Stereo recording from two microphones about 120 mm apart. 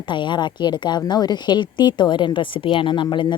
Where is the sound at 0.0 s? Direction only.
40° left (ahead or behind).